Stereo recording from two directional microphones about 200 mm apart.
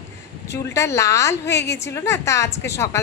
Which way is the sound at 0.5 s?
15° left (ahead or behind).